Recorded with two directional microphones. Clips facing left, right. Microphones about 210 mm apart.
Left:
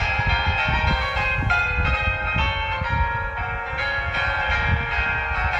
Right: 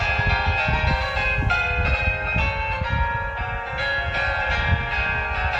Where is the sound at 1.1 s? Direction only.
35° right (ahead or behind).